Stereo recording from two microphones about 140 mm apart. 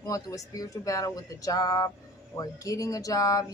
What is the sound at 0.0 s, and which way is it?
Speech, 25° left (ahead or behind).